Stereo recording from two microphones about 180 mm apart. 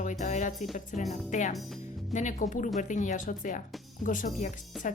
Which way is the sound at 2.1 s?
40° left (ahead or behind).